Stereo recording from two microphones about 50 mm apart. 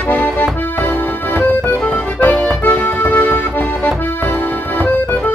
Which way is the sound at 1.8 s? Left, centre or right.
Left.